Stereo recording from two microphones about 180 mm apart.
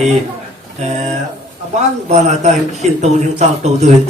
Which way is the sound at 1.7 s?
40° right (ahead or behind).